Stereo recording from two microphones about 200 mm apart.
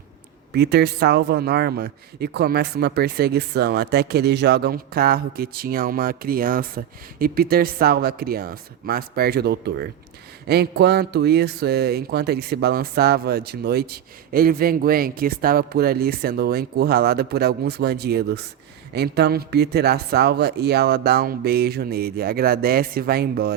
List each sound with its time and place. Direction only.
0.5 s a man's voice: 55° right (ahead or behind)